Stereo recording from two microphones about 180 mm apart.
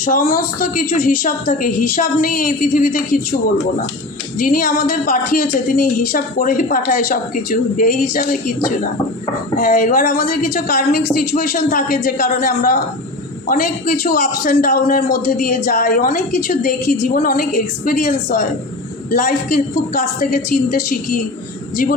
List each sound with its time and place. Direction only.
0.0 s a woman's voice: 55° left (ahead or behind)
4.4 s a woman's voice: 50° left (ahead or behind)
9.6 s a woman's voice: 45° left (ahead or behind)
14.0 s a woman's voice: 55° left (ahead or behind)
19.1 s a woman's voice: 50° left (ahead or behind)